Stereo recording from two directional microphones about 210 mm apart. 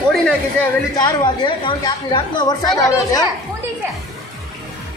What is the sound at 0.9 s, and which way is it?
Speech, 20° left (ahead or behind).